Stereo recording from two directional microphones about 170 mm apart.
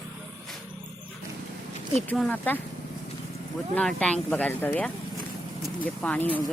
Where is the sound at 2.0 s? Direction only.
5° left (ahead or behind).